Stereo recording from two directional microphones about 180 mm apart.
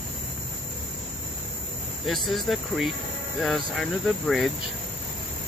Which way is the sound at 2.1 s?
Centre (ahead or behind).